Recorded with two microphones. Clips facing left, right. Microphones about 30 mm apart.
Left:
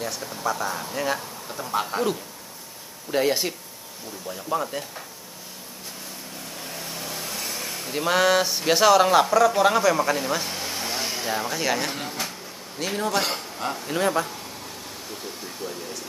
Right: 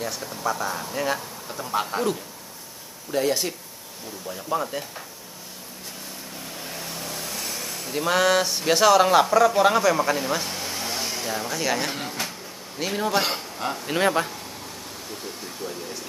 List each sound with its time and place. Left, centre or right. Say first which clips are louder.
0.0 s speech: even; centre
3.1 s speech: left 1 dB; centre
4.3 s speech: even; centre
6.6 s a man's voice: even; centre
13.8 s speech: right 2 dB; right